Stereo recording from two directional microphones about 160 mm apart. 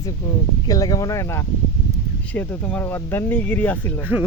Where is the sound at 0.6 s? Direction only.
25° left (ahead or behind).